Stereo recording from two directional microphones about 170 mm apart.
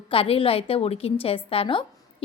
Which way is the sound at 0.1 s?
30° left (ahead or behind).